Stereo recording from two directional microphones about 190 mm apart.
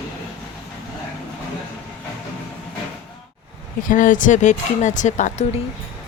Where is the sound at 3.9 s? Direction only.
45° left (ahead or behind).